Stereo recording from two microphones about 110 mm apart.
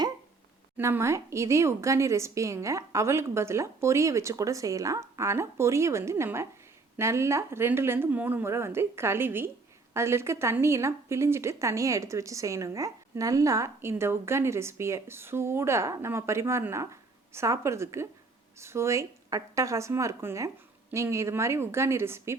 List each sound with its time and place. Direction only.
0.8 s speech: 25° right (ahead or behind)